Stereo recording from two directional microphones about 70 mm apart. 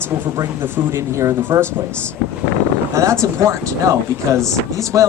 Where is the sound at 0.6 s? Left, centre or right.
Right.